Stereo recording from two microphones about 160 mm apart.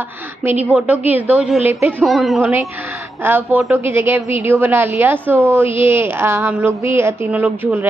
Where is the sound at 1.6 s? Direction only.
40° left (ahead or behind).